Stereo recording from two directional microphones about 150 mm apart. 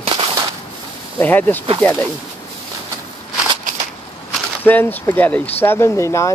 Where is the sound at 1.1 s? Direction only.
10° left (ahead or behind).